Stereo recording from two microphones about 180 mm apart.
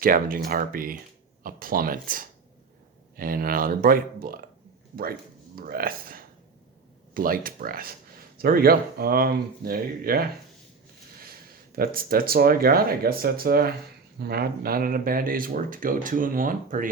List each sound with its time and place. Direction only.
0.0 s speech: 50° right (ahead or behind)
5.5 s speech: 55° right (ahead or behind)